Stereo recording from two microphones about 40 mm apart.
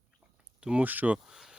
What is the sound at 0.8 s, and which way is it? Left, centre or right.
Speech, right.